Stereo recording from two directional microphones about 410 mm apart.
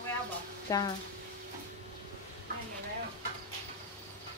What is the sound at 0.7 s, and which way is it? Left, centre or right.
Speech, centre.